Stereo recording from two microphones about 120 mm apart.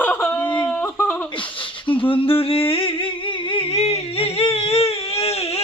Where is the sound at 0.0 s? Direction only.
15° left (ahead or behind).